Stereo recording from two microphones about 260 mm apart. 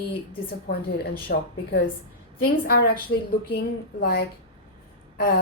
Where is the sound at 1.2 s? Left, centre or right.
Left.